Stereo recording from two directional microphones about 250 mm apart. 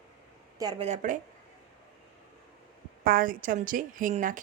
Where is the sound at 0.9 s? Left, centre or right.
Right.